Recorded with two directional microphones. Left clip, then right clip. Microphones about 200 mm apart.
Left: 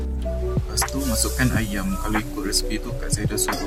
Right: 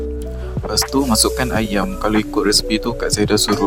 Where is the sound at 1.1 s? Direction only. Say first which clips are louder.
Right 7 dB; 45° right (ahead or behind).